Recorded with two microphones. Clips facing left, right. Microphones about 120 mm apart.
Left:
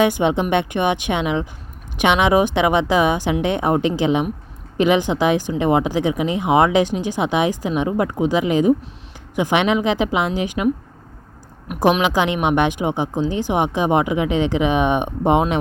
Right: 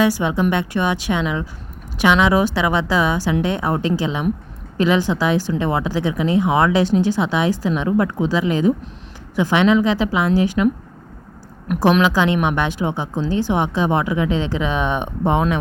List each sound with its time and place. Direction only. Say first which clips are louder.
0.0 s a woman's voice: even; 20° left (ahead or behind)
11.7 s speech: right 1 dB; 15° left (ahead or behind)